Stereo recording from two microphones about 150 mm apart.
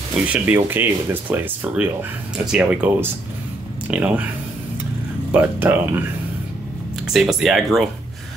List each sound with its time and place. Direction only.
0.1 s speech: 10° right (ahead or behind)
5.3 s speech: 10° right (ahead or behind)
7.1 s speech: centre (ahead or behind)